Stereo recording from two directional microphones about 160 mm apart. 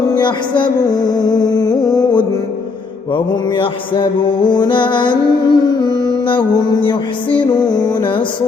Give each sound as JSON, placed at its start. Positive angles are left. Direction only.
{"t": 0.1, "sound": "music", "side_deg": 30}